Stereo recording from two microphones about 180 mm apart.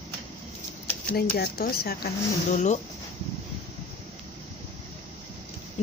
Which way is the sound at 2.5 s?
40° left (ahead or behind).